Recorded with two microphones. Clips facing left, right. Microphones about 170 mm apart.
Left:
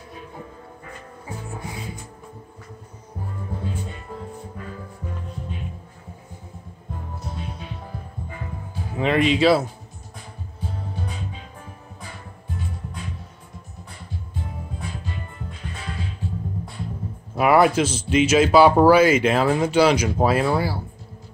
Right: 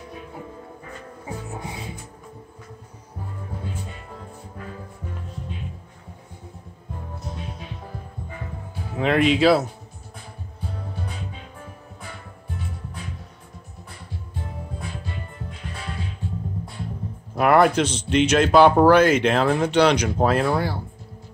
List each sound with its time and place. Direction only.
1.2 s music: 25° right (ahead or behind)
8.9 s speech: centre (ahead or behind)
17.4 s speech: 5° left (ahead or behind)